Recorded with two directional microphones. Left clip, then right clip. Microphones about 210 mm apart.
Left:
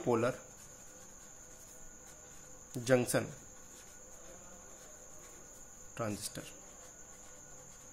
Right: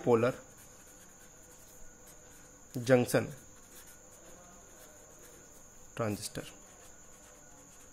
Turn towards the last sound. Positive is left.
turn(degrees=-25)  # may be behind; listen again after turning